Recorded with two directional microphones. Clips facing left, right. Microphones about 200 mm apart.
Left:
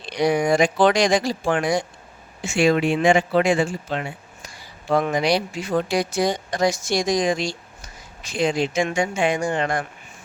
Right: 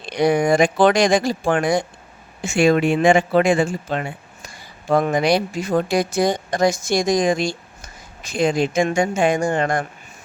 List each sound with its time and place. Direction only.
0.0 s speech: 50° right (ahead or behind)